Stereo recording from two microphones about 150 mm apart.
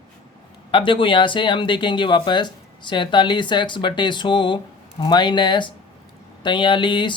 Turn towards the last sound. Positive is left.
turn(degrees=30)  # may be behind; listen again after turning